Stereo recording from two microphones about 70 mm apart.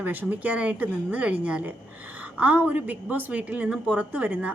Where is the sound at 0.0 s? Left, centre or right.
Right.